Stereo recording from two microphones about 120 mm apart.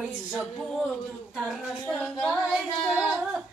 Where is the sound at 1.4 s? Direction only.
Centre (ahead or behind).